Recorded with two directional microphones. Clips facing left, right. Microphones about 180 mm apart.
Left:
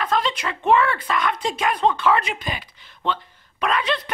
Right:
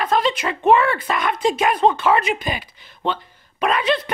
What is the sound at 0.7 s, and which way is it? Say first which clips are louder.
Speech: right 3 dB; 10° right (ahead or behind).